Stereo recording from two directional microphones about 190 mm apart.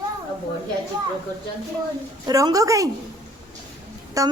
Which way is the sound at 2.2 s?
20° right (ahead or behind).